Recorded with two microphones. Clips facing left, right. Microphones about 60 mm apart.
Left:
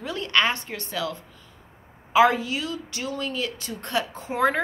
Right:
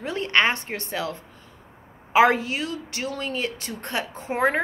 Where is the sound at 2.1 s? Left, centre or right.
Right.